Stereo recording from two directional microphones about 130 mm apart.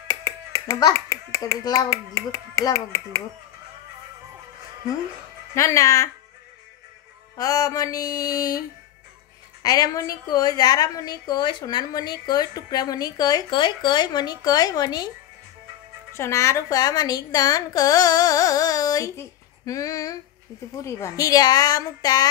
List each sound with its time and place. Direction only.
0.1 s speech: 20° left (ahead or behind)
5.5 s a woman's voice: 20° left (ahead or behind)
7.3 s a woman's voice: 30° left (ahead or behind)
16.1 s a woman's voice: 20° left (ahead or behind)